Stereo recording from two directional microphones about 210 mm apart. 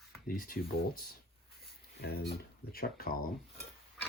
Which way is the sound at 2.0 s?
50° left (ahead or behind).